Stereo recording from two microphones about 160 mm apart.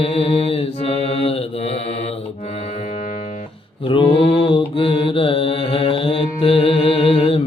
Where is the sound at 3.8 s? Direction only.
35° left (ahead or behind).